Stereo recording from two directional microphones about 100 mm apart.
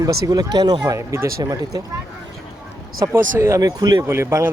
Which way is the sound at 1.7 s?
40° right (ahead or behind).